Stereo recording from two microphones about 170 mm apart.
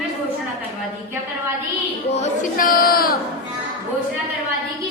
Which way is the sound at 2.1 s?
40° left (ahead or behind).